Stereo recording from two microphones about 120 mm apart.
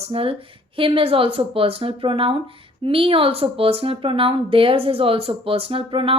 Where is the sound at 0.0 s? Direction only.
50° right (ahead or behind).